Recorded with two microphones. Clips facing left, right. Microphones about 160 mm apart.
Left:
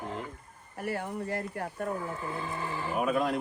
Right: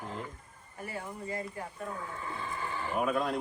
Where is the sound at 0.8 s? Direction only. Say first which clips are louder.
Left 6 dB; 70° left (ahead or behind).